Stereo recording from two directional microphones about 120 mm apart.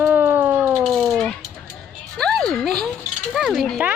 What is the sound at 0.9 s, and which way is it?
Speech, centre (ahead or behind).